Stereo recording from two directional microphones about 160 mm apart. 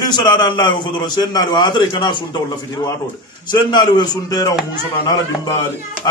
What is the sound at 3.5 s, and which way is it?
A man's voice, 30° left (ahead or behind).